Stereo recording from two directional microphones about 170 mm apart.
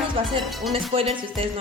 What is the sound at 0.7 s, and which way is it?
Speech, 35° right (ahead or behind).